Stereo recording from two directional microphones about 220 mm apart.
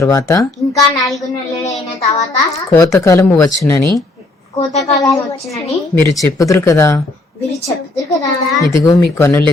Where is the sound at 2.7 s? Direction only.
15° left (ahead or behind).